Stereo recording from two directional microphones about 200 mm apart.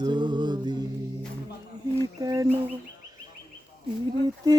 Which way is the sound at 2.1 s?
15° right (ahead or behind).